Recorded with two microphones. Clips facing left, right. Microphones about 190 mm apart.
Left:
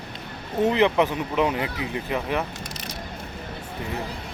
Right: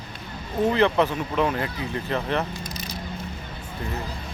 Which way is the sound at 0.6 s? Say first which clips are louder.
Even; 20° left (ahead or behind).